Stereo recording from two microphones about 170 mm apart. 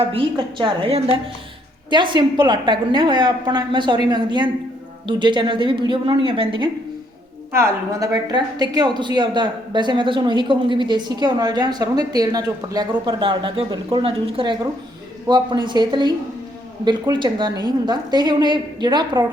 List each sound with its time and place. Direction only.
0.0 s a woman's voice: 30° right (ahead or behind)
7.5 s a woman's voice: 15° right (ahead or behind)